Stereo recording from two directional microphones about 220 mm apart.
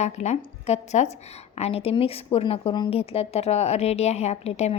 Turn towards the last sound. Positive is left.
turn(degrees=30)  # may be behind; listen again after turning